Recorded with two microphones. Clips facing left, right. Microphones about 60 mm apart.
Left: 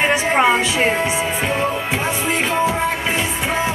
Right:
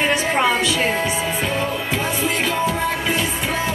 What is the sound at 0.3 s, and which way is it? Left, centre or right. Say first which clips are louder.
Speech: left 3 dB; left.